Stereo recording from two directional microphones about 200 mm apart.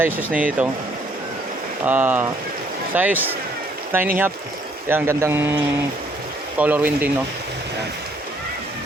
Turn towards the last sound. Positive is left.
turn(degrees=-10)  # may be behind; listen again after turning